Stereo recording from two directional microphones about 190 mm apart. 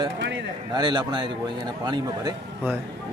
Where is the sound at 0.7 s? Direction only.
20° right (ahead or behind).